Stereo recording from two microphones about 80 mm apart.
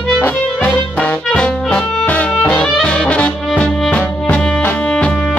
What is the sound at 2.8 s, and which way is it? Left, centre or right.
Brass instrument, centre.